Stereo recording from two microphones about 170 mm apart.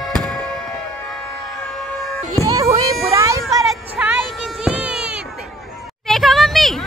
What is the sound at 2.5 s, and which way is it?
Music, 20° right (ahead or behind).